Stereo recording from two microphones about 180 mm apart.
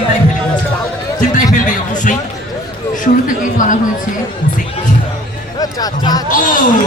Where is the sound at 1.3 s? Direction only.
45° left (ahead or behind).